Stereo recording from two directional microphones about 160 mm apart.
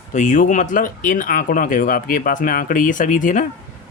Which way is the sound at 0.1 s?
50° left (ahead or behind).